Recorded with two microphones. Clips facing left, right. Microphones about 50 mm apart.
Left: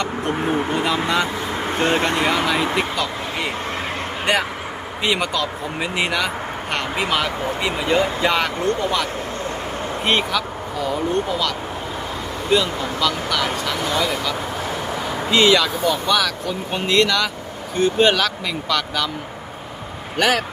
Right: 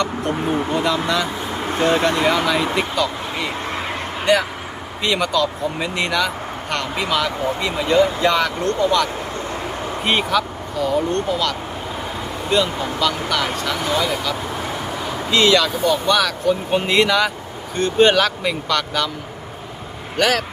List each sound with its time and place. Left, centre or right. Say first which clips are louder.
0.7 s speech: right 1 dB; left
2.2 s speech: right 1 dB; centre
5.0 s speech: right 2 dB; centre
10.0 s speech: right 2 dB; centre
15.3 s speech: even; centre
17.7 s speech: right 2 dB; centre
20.1 s speech: even; centre